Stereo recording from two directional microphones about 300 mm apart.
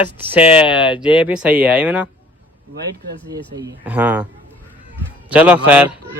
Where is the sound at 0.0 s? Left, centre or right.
Centre.